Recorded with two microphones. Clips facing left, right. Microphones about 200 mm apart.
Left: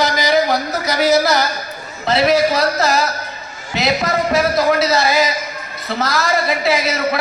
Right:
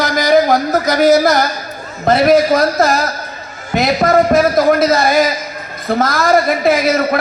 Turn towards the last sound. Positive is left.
turn(degrees=-50)  # may be behind; listen again after turning